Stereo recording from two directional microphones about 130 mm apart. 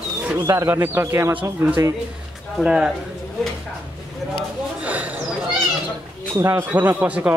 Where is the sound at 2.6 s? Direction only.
5° right (ahead or behind).